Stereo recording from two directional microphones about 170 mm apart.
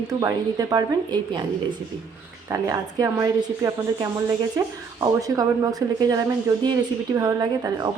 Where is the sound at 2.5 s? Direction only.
20° right (ahead or behind).